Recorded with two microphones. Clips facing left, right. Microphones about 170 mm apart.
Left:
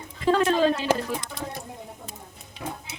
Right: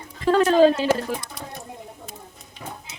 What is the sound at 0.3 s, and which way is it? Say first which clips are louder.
Speech: right 3 dB; 40° right (ahead or behind).